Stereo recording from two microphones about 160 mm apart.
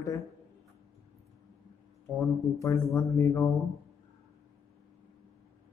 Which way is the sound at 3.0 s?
20° left (ahead or behind).